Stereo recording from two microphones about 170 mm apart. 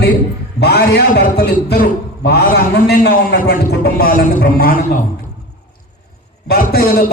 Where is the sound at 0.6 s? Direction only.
70° left (ahead or behind); by 5.0 s 55° left (ahead or behind).